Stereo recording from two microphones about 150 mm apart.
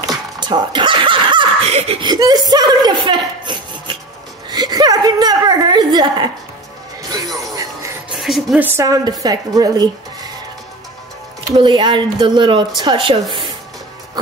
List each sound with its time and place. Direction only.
0.4 s snicker: 30° right (ahead or behind)
1.7 s speech: 45° right (ahead or behind)
2.0 s a woman's voice: 25° right (ahead or behind)
7.5 s music: 20° right (ahead or behind)
8.1 s speech: centre (ahead or behind)
8.6 s speech: 20° right (ahead or behind)
11.5 s speech: 30° right (ahead or behind)